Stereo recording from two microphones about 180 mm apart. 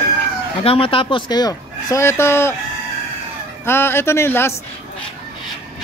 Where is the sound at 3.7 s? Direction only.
10° left (ahead or behind).